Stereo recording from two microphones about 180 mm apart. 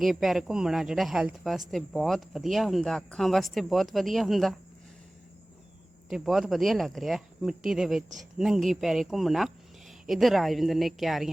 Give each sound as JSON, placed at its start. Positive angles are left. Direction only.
{"t": 0.0, "sound": "a woman's voice", "side_deg": 0}
{"t": 6.1, "sound": "a woman's voice", "side_deg": 0}